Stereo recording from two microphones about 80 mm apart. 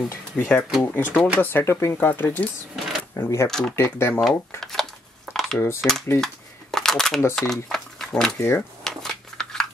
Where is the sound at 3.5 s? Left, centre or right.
Centre.